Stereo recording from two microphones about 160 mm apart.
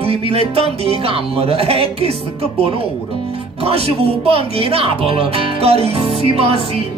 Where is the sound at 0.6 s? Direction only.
40° right (ahead or behind).